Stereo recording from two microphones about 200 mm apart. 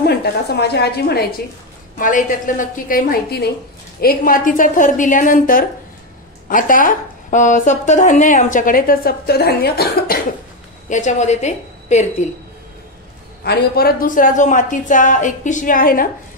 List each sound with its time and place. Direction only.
0.0 s a woman's voice: 55° left (ahead or behind)
2.0 s a woman's voice: 40° left (ahead or behind)
10.9 s speech: 35° left (ahead or behind)
13.4 s speech: 50° left (ahead or behind)